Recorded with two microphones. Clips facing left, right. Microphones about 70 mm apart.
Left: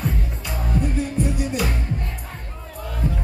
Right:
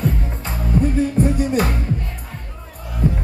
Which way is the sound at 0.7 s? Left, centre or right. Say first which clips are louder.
Right 6 dB; right.